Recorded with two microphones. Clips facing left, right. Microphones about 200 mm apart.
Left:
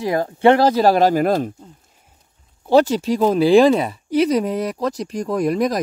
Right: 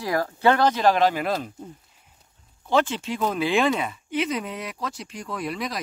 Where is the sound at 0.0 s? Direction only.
20° left (ahead or behind); by 1.5 s 45° left (ahead or behind).